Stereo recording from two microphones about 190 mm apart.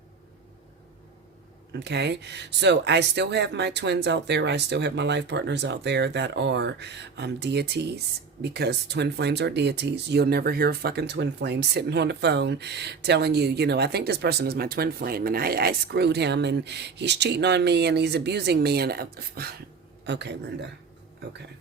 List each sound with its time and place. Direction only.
1.8 s speech: 65° right (ahead or behind)
20.1 s speech: 65° right (ahead or behind)